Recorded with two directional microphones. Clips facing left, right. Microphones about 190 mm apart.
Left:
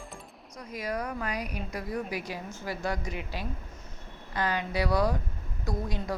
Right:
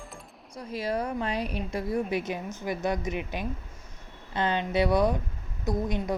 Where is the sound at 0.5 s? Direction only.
30° right (ahead or behind).